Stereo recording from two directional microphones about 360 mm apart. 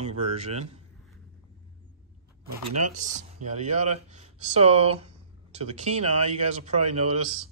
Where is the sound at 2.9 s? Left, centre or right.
Centre.